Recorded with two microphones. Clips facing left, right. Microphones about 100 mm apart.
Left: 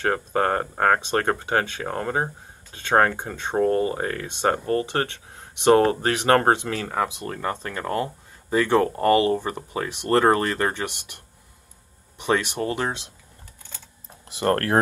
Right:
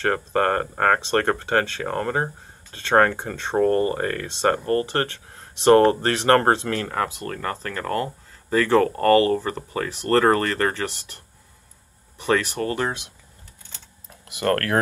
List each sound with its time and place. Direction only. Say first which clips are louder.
0.0 s speech: right 1 dB; 10° left (ahead or behind)
14.2 s speech: even; 25° left (ahead or behind)